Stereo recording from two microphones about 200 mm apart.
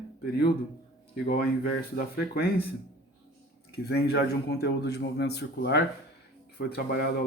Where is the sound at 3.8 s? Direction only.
50° left (ahead or behind).